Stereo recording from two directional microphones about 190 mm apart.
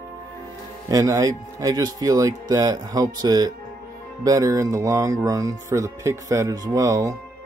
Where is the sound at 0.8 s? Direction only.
15° right (ahead or behind).